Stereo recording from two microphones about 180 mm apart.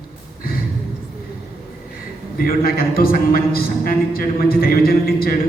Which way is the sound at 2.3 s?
55° left (ahead or behind).